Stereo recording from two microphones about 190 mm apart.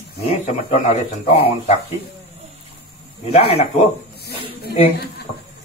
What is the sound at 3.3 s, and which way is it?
Speech, 30° left (ahead or behind).